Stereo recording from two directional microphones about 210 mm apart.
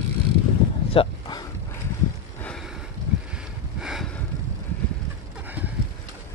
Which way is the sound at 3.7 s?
Centre (ahead or behind).